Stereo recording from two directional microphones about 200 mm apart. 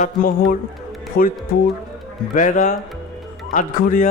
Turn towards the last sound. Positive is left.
turn(degrees=45)  # may be behind; listen again after turning